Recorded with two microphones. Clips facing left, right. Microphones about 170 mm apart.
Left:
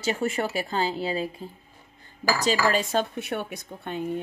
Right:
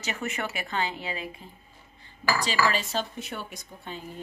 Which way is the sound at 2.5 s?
45° left (ahead or behind).